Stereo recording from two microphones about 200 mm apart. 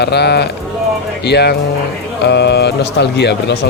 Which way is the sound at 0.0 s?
55° left (ahead or behind).